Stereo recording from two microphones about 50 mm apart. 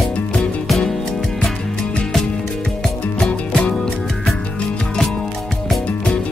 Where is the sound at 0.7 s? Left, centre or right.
Centre.